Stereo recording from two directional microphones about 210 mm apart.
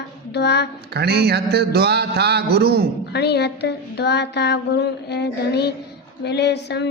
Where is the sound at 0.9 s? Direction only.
50° right (ahead or behind).